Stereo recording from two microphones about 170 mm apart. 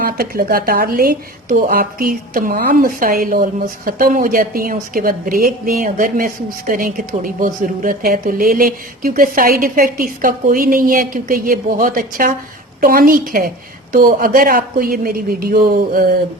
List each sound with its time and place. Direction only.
0.0 s a woman's voice: 60° right (ahead or behind)